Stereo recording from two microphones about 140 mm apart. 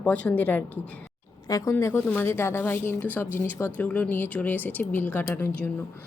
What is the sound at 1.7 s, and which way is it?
Speech, 15° left (ahead or behind).